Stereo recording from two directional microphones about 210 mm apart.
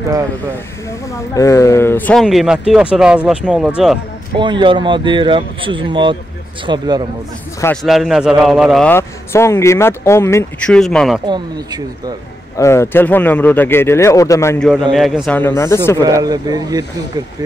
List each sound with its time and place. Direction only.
1.3 s speech: 15° left (ahead or behind); by 4.0 s centre (ahead or behind)
4.4 s speech: 20° right (ahead or behind)
7.6 s a man's voice: centre (ahead or behind)
10.8 s speech: centre (ahead or behind)
11.2 s speech: 20° right (ahead or behind)
12.5 s a man's voice: 15° left (ahead or behind)
14.7 s a man's voice: centre (ahead or behind)
16.0 s speech: 15° right (ahead or behind)